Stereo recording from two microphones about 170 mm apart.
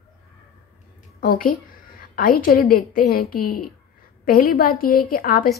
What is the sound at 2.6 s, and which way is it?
A woman's voice, 60° left (ahead or behind).